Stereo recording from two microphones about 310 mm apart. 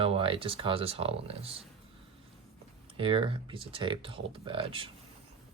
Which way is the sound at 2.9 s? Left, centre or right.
Centre.